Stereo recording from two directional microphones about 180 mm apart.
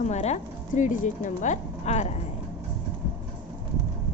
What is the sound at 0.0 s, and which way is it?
A woman's voice, 40° left (ahead or behind).